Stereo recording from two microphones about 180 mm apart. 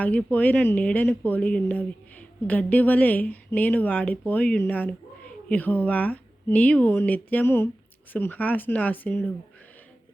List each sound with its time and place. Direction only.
0.0 s a woman's voice: 10° left (ahead or behind)